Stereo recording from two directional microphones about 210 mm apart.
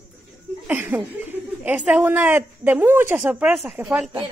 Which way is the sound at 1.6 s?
5° right (ahead or behind).